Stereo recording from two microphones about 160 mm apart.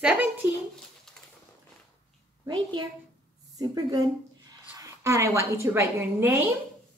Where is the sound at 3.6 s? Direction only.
25° right (ahead or behind).